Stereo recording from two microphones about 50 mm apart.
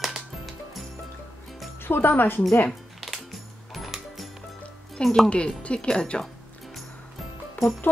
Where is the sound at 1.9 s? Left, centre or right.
Left.